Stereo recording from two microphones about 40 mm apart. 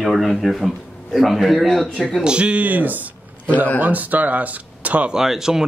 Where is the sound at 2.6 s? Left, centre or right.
Right.